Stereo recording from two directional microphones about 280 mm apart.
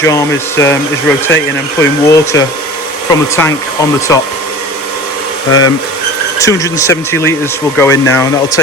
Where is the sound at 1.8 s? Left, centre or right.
Centre.